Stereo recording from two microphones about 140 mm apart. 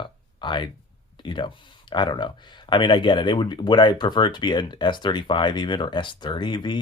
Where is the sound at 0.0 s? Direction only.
35° left (ahead or behind).